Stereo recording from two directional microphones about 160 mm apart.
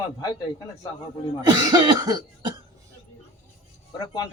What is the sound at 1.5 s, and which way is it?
Cough, 25° right (ahead or behind).